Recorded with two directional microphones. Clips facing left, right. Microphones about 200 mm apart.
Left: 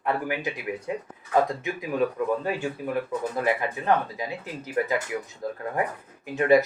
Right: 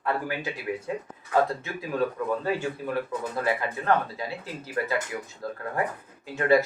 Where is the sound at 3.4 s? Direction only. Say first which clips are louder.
Left 1 dB; 15° left (ahead or behind).